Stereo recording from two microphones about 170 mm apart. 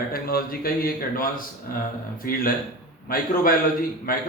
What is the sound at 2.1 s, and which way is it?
A man's voice, 55° left (ahead or behind).